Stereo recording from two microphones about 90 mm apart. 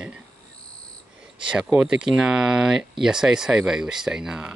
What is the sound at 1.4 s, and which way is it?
Speech, 10° right (ahead or behind).